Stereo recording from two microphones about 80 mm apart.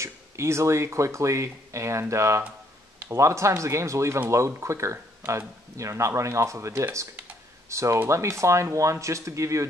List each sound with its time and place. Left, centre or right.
0.0 s speech: right